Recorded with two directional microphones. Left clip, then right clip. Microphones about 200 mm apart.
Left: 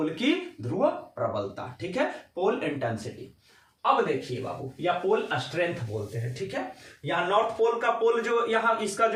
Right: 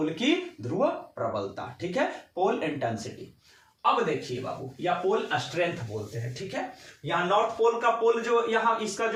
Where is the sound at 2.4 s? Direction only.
5° left (ahead or behind).